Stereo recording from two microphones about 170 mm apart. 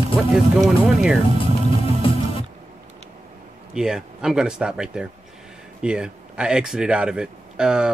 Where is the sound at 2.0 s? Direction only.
30° left (ahead or behind).